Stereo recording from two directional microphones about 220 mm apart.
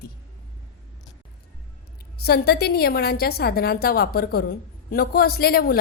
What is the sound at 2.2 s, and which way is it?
A woman's voice, 45° left (ahead or behind).